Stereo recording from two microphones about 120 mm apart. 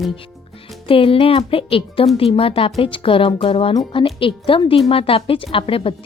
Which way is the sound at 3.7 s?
35° left (ahead or behind).